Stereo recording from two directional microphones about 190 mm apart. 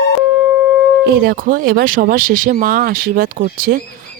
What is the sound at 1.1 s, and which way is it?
Speech, 50° right (ahead or behind).